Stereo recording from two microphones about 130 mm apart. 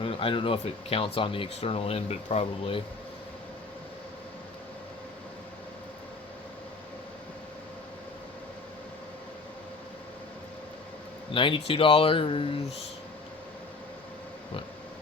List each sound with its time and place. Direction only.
0.0 s speech: 45° left (ahead or behind)
11.3 s speech: 40° left (ahead or behind)